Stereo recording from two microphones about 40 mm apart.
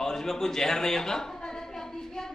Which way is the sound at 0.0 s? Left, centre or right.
Centre.